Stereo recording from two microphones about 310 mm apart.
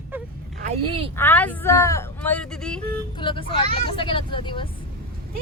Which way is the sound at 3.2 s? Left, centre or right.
Centre.